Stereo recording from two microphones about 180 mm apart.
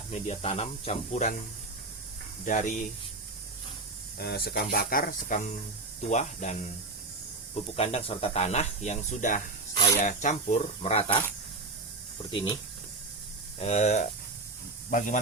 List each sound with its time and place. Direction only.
0.1 s speech: 35° left (ahead or behind)
2.4 s speech: 45° left (ahead or behind)
4.2 s speech: 60° left (ahead or behind)
6.0 s speech: 40° left (ahead or behind)
9.7 s speech: 20° left (ahead or behind)
10.0 s speech: 40° left (ahead or behind)
13.6 s speech: 35° left (ahead or behind)